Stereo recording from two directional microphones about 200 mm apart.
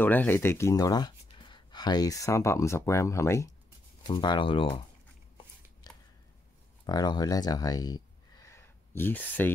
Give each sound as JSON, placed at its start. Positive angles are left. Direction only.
{"t": 0.0, "sound": "speech", "side_deg": 10}
{"t": 5.9, "sound": "a sound", "side_deg": 20}
{"t": 6.9, "sound": "speech", "side_deg": 20}